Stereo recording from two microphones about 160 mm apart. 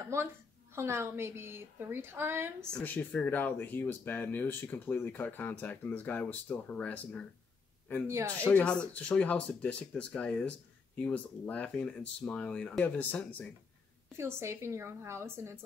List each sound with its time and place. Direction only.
0.7 s a woman's voice: 15° right (ahead or behind)
2.7 s speech: 10° left (ahead or behind)
8.1 s a woman's voice: 15° right (ahead or behind)
8.5 s speech: 10° left (ahead or behind)
14.1 s a woman's voice: 15° right (ahead or behind)